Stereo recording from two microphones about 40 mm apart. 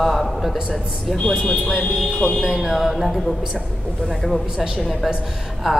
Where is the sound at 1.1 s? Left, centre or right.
Centre.